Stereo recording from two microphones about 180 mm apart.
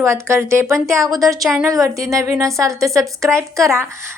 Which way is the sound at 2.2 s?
15° right (ahead or behind).